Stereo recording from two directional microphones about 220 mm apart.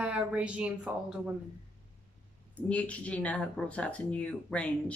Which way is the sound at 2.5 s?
5° left (ahead or behind).